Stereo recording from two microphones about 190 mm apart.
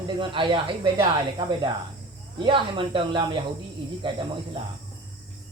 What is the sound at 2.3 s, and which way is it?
Speech, 25° right (ahead or behind).